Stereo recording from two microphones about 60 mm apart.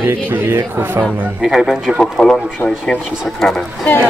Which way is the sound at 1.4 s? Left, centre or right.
Centre.